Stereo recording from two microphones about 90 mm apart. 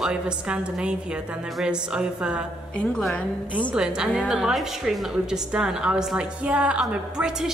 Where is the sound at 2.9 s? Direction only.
5° left (ahead or behind).